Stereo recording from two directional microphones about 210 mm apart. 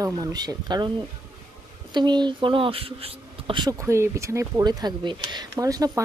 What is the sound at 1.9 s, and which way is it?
Speech, 20° right (ahead or behind).